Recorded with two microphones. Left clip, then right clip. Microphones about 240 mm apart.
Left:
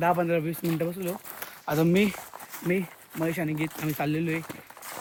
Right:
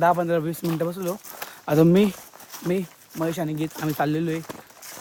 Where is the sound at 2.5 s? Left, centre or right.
Centre.